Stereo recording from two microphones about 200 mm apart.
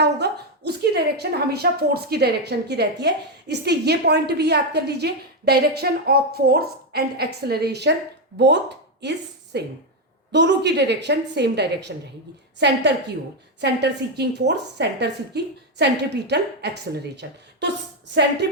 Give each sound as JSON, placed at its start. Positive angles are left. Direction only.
{"t": 0.0, "sound": "a woman's voice", "side_deg": -55}